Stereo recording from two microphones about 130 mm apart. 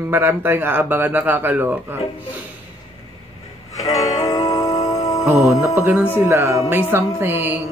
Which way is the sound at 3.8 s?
30° left (ahead or behind).